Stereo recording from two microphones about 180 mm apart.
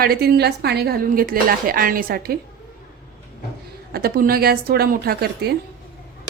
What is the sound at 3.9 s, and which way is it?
A woman's voice, 55° right (ahead or behind).